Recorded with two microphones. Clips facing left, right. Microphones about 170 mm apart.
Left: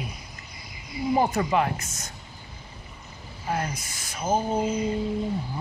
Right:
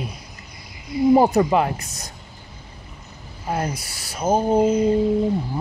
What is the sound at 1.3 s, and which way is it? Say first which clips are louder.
Speech: right 6 dB; 35° right (ahead or behind).